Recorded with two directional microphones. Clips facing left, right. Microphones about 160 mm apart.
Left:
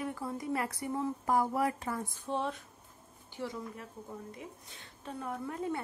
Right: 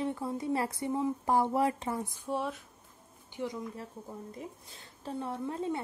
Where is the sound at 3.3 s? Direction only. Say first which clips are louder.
Right 3 dB; 20° right (ahead or behind).